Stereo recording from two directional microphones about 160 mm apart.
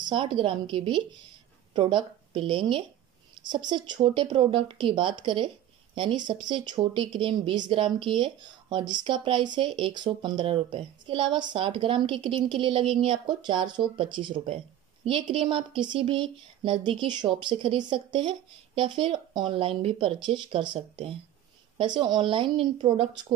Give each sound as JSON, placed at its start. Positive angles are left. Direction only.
{"t": 0.0, "sound": "speech", "side_deg": -30}